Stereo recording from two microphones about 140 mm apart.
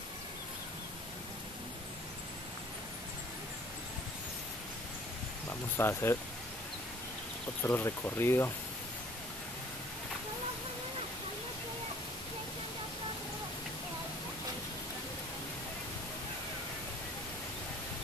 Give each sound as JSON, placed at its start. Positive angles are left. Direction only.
{"t": 5.5, "sound": "speech", "side_deg": 20}
{"t": 7.6, "sound": "speech", "side_deg": 15}